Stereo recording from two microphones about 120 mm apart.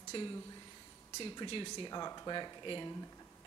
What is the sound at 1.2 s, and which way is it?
Speech, 45° left (ahead or behind).